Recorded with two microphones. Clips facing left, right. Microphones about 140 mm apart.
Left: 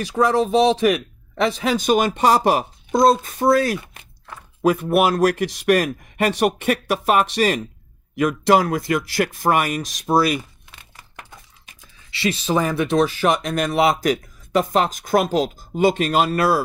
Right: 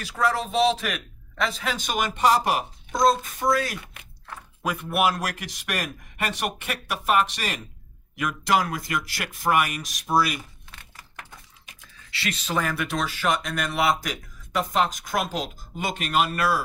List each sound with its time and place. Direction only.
0.2 s speech: 20° left (ahead or behind)
1.9 s speech: 35° left (ahead or behind)
11.6 s speech: 25° left (ahead or behind)